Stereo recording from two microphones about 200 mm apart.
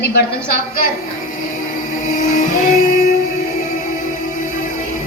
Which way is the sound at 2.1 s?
40° left (ahead or behind).